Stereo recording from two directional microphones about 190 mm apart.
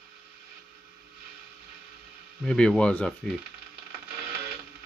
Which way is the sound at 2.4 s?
5° left (ahead or behind).